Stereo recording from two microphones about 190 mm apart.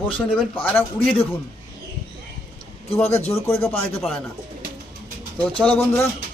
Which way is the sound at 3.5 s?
10° left (ahead or behind).